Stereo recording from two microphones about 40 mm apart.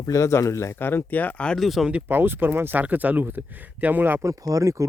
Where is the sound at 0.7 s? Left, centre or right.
Left.